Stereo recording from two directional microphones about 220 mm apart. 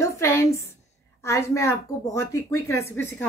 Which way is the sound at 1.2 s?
15° left (ahead or behind).